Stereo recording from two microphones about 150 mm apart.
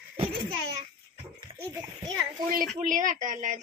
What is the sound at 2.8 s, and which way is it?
Speech, 60° right (ahead or behind).